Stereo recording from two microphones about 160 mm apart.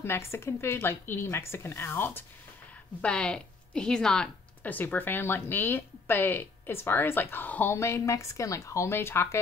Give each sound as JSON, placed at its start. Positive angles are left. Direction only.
{"t": 0.0, "sound": "speech", "side_deg": 15}